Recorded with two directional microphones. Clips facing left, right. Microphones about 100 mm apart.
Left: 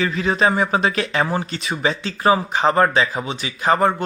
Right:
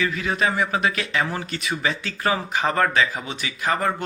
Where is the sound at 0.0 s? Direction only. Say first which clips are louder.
Left 4 dB; 30° left (ahead or behind).